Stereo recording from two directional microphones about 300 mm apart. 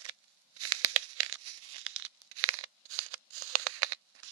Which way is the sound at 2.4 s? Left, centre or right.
Right.